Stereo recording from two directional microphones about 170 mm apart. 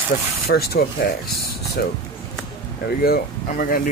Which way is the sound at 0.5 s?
65° left (ahead or behind).